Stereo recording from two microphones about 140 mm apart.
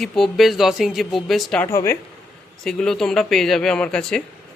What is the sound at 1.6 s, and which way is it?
Speech, 20° left (ahead or behind).